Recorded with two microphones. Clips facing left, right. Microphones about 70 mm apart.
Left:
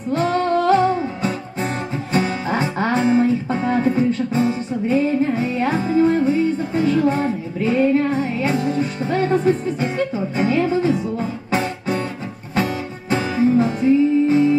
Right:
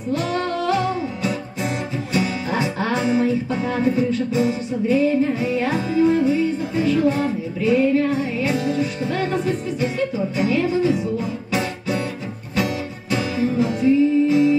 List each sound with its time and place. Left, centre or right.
0.1 s music: left
13.1 s music: left